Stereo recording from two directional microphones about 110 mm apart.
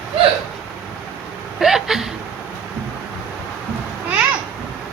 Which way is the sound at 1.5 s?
5° right (ahead or behind).